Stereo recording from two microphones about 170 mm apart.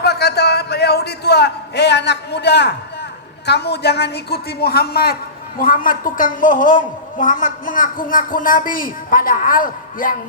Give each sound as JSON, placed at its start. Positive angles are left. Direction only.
{"t": 0.0, "sound": "a sound", "side_deg": 70}
{"t": 3.4, "sound": "a woman's voice", "side_deg": 80}
{"t": 5.5, "sound": "a woman's voice", "side_deg": 55}